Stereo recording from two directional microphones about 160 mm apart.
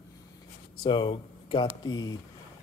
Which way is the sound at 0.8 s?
30° left (ahead or behind).